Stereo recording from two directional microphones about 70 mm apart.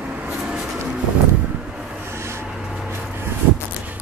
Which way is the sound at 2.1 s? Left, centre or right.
Right.